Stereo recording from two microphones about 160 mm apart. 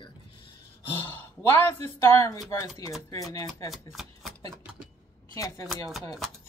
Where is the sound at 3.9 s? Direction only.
Centre (ahead or behind).